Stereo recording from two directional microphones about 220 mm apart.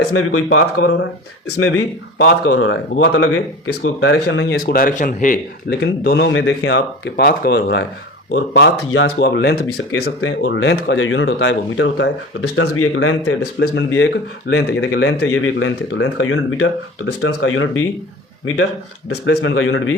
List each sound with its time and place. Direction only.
0.1 s speech: 70° left (ahead or behind)
4.6 s speech: 40° left (ahead or behind); by 9.1 s 65° left (ahead or behind)
9.1 s speech: 50° left (ahead or behind); by 13.5 s 75° left (ahead or behind)
13.6 s speech: 55° left (ahead or behind)